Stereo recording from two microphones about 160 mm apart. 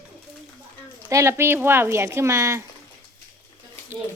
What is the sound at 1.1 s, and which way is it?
Speech, 15° right (ahead or behind).